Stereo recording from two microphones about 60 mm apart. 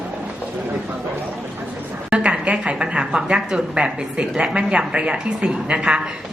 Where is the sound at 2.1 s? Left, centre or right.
Centre.